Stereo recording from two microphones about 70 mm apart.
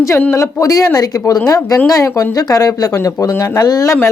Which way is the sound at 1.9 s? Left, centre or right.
Left.